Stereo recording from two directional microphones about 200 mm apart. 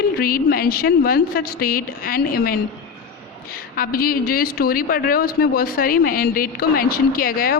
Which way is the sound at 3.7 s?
45° left (ahead or behind).